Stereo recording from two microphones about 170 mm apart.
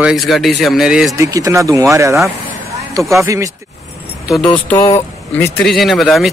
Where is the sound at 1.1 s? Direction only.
20° right (ahead or behind).